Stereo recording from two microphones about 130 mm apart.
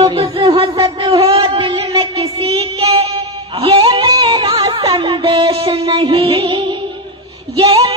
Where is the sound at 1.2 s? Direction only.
50° right (ahead or behind).